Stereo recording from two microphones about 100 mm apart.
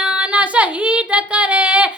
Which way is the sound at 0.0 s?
10° right (ahead or behind).